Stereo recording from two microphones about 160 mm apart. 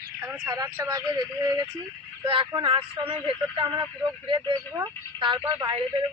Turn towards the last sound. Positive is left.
turn(degrees=-30)  # may be behind; listen again after turning